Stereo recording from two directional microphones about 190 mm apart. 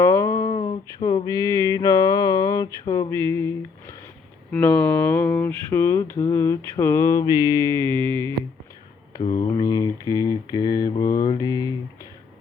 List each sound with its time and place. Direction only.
0.0 s mantra: 15° left (ahead or behind)
4.5 s a sound: 10° left (ahead or behind)
9.1 s mantra: 25° left (ahead or behind)